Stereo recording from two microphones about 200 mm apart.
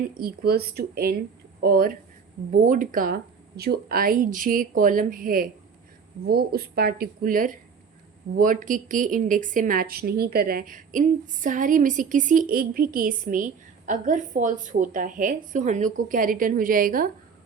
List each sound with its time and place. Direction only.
0.2 s a woman's voice: 50° right (ahead or behind)